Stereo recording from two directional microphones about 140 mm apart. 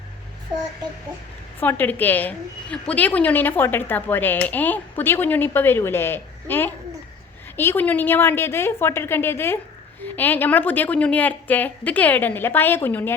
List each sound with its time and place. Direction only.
1.5 s a woman's voice: 15° left (ahead or behind)